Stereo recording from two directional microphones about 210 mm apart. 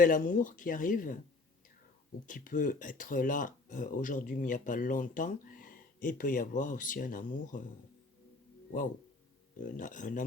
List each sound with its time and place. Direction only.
0.0 s speech: 40° left (ahead or behind)
2.2 s speech: 40° left (ahead or behind)
9.6 s speech: 40° left (ahead or behind)